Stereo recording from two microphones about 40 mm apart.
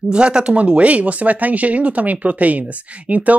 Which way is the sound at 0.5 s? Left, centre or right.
Right.